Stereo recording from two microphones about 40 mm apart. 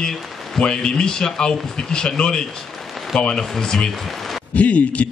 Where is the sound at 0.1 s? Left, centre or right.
Centre.